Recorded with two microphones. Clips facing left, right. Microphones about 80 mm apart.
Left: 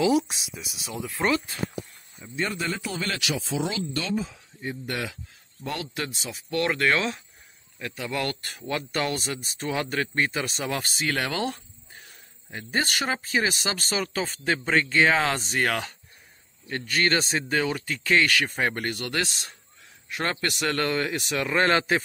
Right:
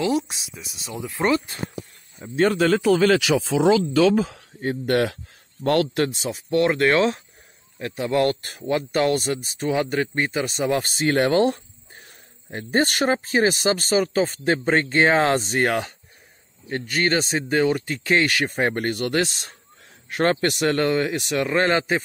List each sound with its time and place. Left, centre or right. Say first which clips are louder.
0.0 s speech: even; centre
0.9 s speech: right 3 dB; centre
2.3 s speech: right 11 dB; right
6.0 s speech: right 9 dB; right; by 10.6 s centre
10.6 s speech: right 7 dB; right; by 22.0 s centre